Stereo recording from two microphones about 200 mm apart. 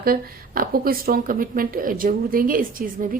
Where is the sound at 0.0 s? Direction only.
45° right (ahead or behind).